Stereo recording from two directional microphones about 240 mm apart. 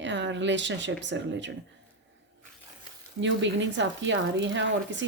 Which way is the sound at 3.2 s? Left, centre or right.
Right.